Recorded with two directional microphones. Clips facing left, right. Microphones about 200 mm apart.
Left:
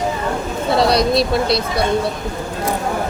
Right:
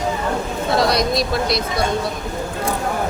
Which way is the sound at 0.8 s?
30° left (ahead or behind).